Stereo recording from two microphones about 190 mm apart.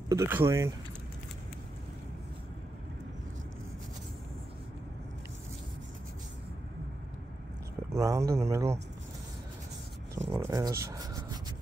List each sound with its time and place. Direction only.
0.1 s speech: 15° right (ahead or behind)
7.9 s speech: 15° right (ahead or behind)
10.3 s speech: 15° right (ahead or behind)